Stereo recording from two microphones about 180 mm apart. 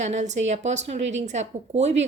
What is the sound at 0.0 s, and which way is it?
A woman's voice, 40° right (ahead or behind).